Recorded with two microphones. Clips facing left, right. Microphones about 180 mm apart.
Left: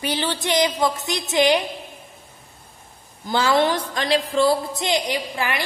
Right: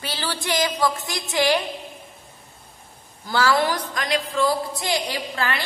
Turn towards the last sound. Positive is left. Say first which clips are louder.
# left 2 dB
turn(degrees=15)  # may be behind; listen again after turning